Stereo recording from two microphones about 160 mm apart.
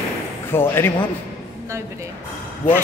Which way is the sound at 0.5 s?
15° left (ahead or behind).